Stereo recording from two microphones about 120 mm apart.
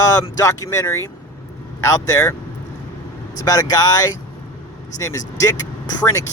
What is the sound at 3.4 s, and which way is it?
Speech, 30° left (ahead or behind).